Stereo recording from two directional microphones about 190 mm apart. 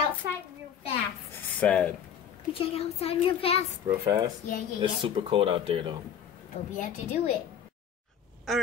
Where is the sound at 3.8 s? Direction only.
25° right (ahead or behind).